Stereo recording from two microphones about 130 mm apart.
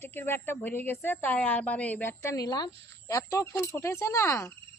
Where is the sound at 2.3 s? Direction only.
30° left (ahead or behind).